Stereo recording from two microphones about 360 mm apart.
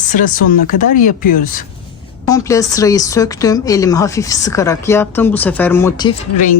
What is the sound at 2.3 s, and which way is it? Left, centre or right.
Speech, centre.